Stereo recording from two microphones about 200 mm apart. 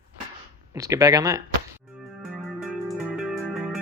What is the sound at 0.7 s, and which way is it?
Speech, 15° right (ahead or behind).